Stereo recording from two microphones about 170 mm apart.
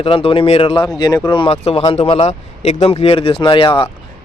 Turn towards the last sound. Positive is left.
turn(degrees=30)  # may be behind; listen again after turning